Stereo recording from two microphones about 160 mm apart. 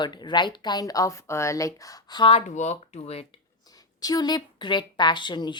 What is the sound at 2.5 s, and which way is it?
Speech, 45° left (ahead or behind).